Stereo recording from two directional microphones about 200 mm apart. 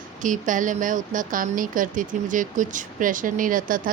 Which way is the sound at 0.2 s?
40° right (ahead or behind).